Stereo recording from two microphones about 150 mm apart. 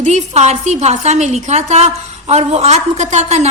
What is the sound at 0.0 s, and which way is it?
A woman's voice, 50° right (ahead or behind).